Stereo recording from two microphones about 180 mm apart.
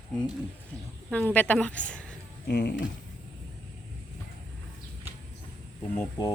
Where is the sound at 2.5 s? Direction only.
65° left (ahead or behind).